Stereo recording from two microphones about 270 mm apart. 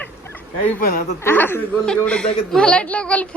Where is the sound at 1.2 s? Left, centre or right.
Centre.